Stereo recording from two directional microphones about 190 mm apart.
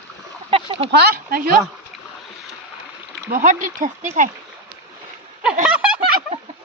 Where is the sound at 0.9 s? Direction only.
55° right (ahead or behind).